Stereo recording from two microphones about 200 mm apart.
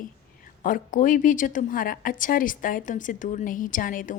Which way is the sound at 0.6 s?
40° left (ahead or behind).